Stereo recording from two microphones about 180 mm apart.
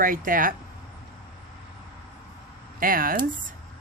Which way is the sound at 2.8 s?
50° right (ahead or behind).